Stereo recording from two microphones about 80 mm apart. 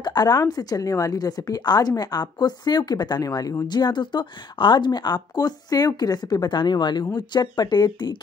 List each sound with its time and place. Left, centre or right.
0.0 s a woman's voice: left
3.6 s speech: left